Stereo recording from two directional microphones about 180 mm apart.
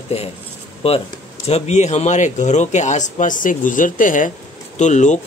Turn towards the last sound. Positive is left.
turn(degrees=40)  # may be behind; listen again after turning